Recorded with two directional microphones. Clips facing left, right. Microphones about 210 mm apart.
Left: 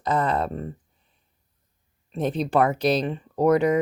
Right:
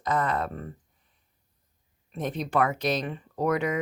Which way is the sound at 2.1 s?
30° left (ahead or behind).